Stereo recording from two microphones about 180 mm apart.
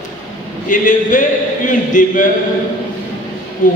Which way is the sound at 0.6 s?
45° left (ahead or behind).